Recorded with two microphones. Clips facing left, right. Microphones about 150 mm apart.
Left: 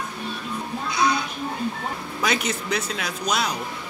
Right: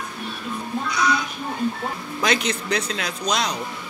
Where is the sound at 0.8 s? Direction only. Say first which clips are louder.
Left 1 dB; 25° left (ahead or behind).